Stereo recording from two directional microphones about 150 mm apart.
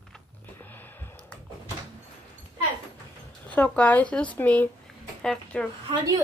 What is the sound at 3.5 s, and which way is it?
Speech, 10° left (ahead or behind).